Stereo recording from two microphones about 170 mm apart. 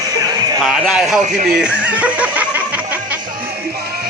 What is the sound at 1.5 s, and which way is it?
Music, 5° right (ahead or behind).